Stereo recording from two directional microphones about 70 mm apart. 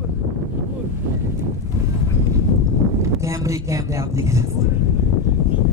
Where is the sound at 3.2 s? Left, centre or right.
Right.